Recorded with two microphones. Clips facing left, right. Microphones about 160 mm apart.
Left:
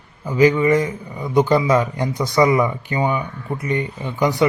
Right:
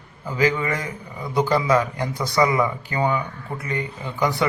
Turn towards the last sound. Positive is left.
turn(degrees=20)  # may be behind; listen again after turning